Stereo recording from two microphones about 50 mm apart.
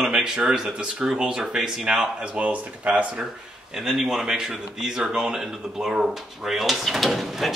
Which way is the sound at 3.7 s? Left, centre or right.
Centre.